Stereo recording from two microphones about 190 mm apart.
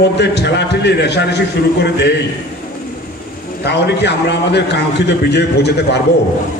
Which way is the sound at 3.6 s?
60° left (ahead or behind).